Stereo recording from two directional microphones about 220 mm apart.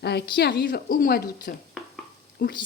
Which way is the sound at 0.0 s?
50° left (ahead or behind).